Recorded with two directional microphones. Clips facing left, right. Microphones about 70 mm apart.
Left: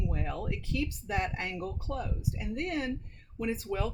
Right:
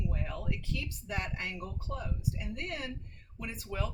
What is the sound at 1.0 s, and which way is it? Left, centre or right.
Speech, left.